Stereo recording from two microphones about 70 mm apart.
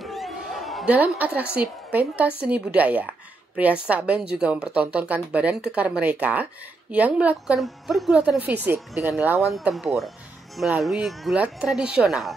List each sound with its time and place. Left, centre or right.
0.0 s a sound: centre
0.8 s a woman's voice: right
7.5 s speech: centre
8.4 s a woman's voice: right
9.4 s speech: centre
11.3 s speech: centre